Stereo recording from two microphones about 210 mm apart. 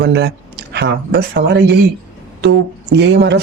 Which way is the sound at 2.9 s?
55° right (ahead or behind).